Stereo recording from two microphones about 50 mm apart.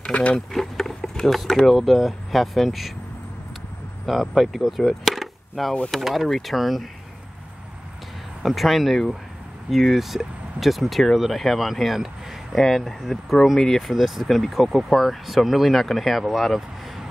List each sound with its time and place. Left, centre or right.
0.0 s speech: left
0.5 s a sound: centre
1.5 s speech: centre
4.0 s speech: centre
8.4 s speech: centre